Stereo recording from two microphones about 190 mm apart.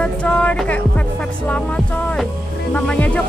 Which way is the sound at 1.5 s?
5° left (ahead or behind).